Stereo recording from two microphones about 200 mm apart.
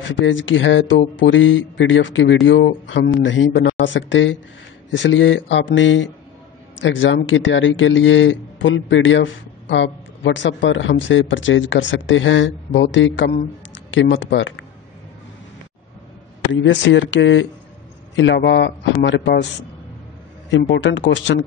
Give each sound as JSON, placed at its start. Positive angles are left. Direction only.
{"t": 0.2, "sound": "speech", "side_deg": 70}
{"t": 16.5, "sound": "speech", "side_deg": 70}
{"t": 20.4, "sound": "speech", "side_deg": 65}